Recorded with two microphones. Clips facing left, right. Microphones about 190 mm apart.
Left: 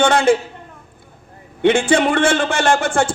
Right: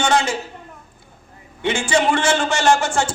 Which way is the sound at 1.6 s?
55° left (ahead or behind).